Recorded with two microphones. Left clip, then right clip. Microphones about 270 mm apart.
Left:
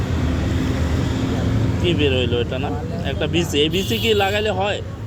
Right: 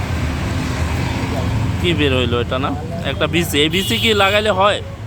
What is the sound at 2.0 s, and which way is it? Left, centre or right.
Speech, centre.